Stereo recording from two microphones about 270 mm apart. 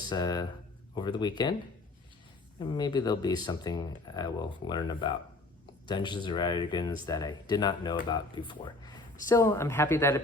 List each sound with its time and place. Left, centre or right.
0.1 s speech: centre
2.6 s speech: centre